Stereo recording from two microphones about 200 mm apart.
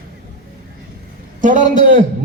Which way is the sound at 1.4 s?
40° right (ahead or behind).